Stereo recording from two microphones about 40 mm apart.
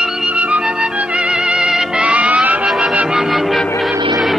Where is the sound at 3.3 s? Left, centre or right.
Centre.